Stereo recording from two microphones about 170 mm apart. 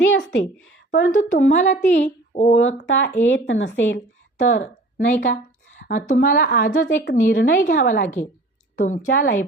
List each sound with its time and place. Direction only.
0.0 s a sound: 90° left
0.9 s a woman's voice: 90° left
1.5 s a woman's voice: 45° left (ahead or behind)
2.5 s a woman's voice: 90° left
4.4 s a woman's voice: 50° left (ahead or behind)